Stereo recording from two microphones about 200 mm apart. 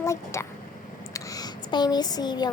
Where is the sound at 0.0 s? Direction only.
15° left (ahead or behind).